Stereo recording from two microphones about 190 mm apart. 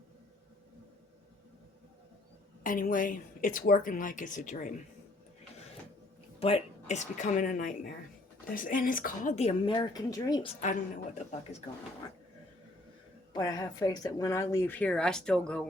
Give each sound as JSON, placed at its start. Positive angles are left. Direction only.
{"t": 2.6, "sound": "speech", "side_deg": 45}
{"t": 6.4, "sound": "speech", "side_deg": 35}
{"t": 13.3, "sound": "speech", "side_deg": 20}